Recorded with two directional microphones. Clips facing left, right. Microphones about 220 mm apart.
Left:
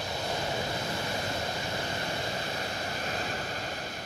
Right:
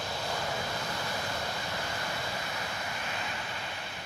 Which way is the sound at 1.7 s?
30° left (ahead or behind).